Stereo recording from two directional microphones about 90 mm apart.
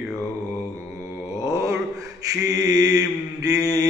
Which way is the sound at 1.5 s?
35° right (ahead or behind).